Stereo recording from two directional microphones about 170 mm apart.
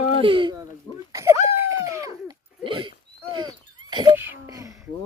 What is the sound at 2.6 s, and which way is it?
Speech, 30° right (ahead or behind).